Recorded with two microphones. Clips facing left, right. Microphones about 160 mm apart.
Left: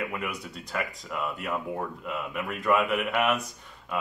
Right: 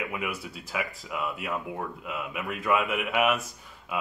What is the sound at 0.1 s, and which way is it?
Speech, centre (ahead or behind).